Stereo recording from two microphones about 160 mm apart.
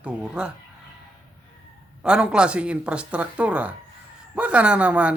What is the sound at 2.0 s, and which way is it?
Speech, 5° right (ahead or behind).